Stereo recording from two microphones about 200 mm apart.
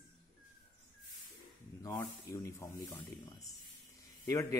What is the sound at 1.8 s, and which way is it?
Speech, 15° left (ahead or behind).